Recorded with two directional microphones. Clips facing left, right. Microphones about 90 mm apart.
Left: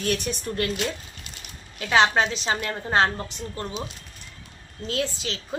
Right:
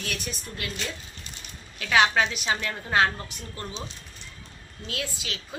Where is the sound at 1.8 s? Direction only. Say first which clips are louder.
Left 2 dB; 30° left (ahead or behind).